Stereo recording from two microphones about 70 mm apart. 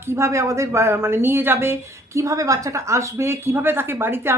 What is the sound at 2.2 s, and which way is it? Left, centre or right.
A woman's voice, right.